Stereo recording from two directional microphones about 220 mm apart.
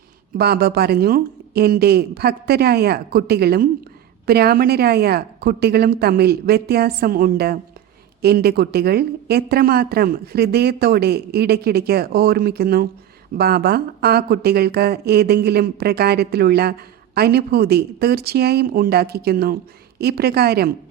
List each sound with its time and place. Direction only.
0.3 s speech: 45° right (ahead or behind)